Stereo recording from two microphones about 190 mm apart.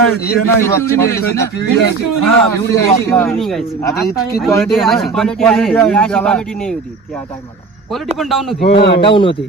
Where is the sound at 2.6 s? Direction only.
15° left (ahead or behind).